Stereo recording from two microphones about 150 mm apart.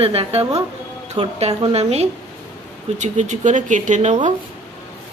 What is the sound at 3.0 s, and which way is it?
Speech, 55° right (ahead or behind).